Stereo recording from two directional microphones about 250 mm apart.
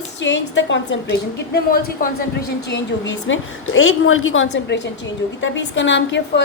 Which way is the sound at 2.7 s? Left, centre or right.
Left.